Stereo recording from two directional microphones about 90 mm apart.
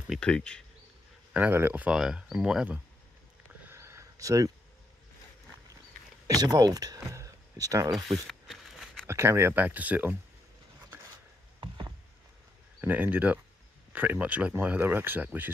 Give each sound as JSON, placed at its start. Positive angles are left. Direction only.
{"t": 0.2, "sound": "speech", "side_deg": 10}
{"t": 1.3, "sound": "speech", "side_deg": -20}
{"t": 2.0, "sound": "speech", "side_deg": -5}
{"t": 3.6, "sound": "a sound", "side_deg": -30}
{"t": 6.2, "sound": "speech", "side_deg": -45}
{"t": 7.9, "sound": "a sound", "side_deg": 0}
{"t": 9.0, "sound": "speech", "side_deg": -30}
{"t": 11.6, "sound": "a sound", "side_deg": -60}
{"t": 12.8, "sound": "speech", "side_deg": -20}